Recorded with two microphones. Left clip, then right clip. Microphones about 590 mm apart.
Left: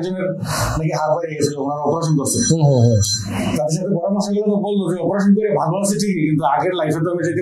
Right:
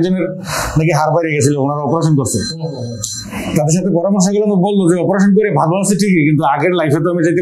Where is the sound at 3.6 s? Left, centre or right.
Right.